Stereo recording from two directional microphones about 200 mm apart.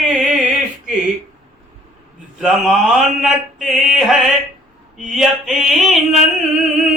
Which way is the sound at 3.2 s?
Centre (ahead or behind).